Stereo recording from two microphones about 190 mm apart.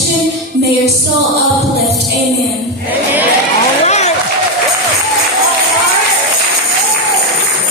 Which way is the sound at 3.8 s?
35° left (ahead or behind).